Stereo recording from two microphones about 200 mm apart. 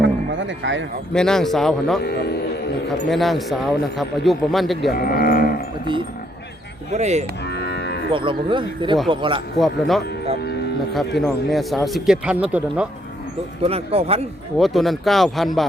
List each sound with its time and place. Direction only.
0.0 s music: 65° right (ahead or behind)
1.1 s speech: 5° left (ahead or behind)
2.0 s a man's voice: 55° left (ahead or behind)
3.1 s speech: centre (ahead or behind)
4.9 s livestock: 45° left (ahead or behind)
6.9 s speech: 35° right (ahead or behind)
7.4 s moo: 55° left (ahead or behind)
8.1 s speech: 25° right (ahead or behind)
9.6 s speech: centre (ahead or behind)
11.2 s speech: centre (ahead or behind)
13.6 s speech: 30° right (ahead or behind)
14.6 s speech: centre (ahead or behind)